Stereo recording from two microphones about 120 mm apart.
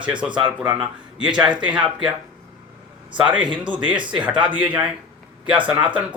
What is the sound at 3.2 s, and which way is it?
Speech, 10° right (ahead or behind).